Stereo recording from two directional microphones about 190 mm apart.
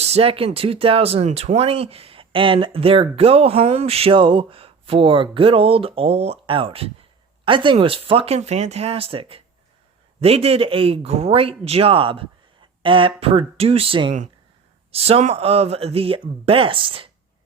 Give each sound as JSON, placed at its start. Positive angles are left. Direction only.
{"t": 0.0, "sound": "speech", "side_deg": -30}